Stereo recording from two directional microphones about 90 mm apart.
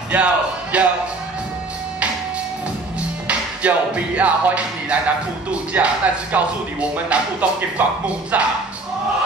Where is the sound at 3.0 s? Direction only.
15° right (ahead or behind).